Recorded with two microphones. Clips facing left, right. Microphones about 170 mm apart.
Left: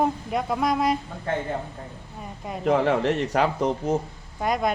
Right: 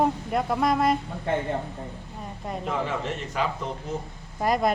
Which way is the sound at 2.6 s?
70° left (ahead or behind).